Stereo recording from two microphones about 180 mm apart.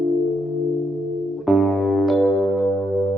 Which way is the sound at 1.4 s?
Centre (ahead or behind).